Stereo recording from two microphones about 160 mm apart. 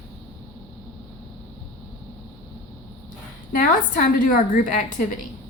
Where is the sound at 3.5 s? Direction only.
60° left (ahead or behind).